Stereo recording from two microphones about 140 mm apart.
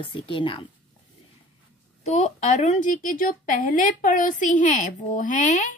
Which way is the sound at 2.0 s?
55° left (ahead or behind).